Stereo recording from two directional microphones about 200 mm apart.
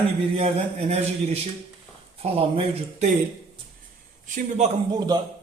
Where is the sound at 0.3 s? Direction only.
30° right (ahead or behind).